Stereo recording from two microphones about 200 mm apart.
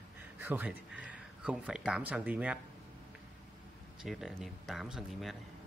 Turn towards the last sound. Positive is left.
turn(degrees=0)  # may be behind; listen again after turning